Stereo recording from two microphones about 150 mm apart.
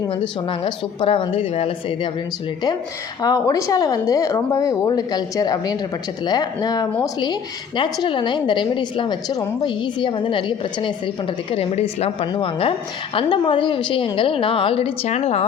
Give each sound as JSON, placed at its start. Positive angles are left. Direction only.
{"t": 0.6, "sound": "a woman's voice", "side_deg": 40}
{"t": 3.2, "sound": "a woman's voice", "side_deg": 25}